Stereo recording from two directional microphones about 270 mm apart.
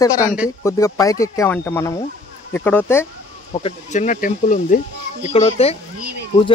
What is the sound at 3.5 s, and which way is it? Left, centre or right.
Speech, left.